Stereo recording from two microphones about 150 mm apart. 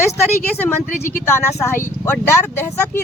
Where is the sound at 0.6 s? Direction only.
15° left (ahead or behind).